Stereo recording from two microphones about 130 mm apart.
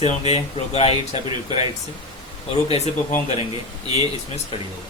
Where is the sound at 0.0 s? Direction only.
50° left (ahead or behind).